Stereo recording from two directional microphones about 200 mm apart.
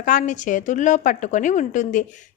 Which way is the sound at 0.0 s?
40° left (ahead or behind).